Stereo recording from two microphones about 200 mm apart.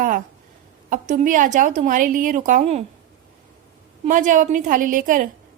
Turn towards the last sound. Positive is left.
turn(degrees=-40)  # may be behind; listen again after turning